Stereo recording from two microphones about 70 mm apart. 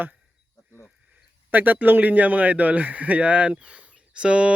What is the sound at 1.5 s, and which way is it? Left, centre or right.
A man's voice, right.